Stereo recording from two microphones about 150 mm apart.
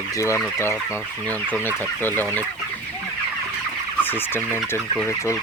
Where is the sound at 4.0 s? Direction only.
15° left (ahead or behind).